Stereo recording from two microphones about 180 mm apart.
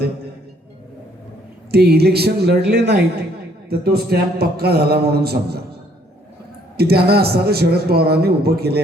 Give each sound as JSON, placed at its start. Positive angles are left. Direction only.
{"t": 1.7, "sound": "a man's voice", "side_deg": -60}
{"t": 6.7, "sound": "a man's voice", "side_deg": -60}